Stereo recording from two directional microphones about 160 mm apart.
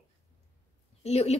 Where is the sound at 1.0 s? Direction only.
40° left (ahead or behind).